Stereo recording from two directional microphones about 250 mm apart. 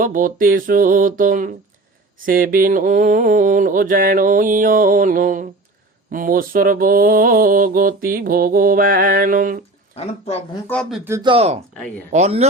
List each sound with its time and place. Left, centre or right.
0.0 s mantra: right
10.0 s speech: left
10.7 s speech: centre; by 12.5 s right